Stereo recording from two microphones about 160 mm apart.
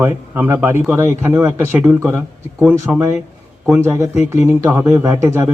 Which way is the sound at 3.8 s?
15° right (ahead or behind).